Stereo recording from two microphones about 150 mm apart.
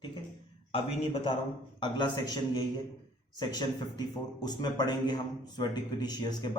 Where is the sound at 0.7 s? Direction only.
40° left (ahead or behind).